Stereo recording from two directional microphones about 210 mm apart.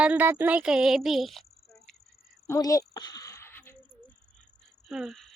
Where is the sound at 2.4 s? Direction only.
15° left (ahead or behind).